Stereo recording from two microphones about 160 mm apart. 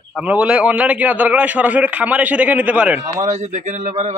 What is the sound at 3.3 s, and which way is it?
Speech, 45° right (ahead or behind).